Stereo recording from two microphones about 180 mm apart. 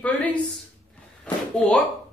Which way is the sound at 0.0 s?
10° left (ahead or behind).